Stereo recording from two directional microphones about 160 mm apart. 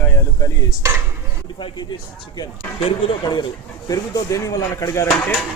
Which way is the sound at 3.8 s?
20° left (ahead or behind).